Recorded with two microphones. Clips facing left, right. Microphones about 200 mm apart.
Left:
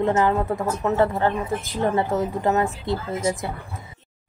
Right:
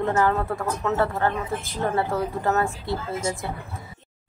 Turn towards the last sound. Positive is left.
turn(degrees=20)  # may be behind; listen again after turning